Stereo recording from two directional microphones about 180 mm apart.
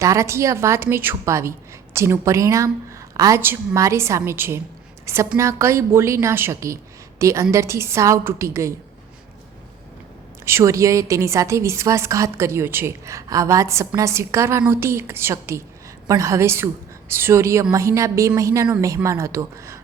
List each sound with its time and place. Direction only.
0.0 s a woman's voice: 15° right (ahead or behind)
10.4 s a woman's voice: 15° right (ahead or behind)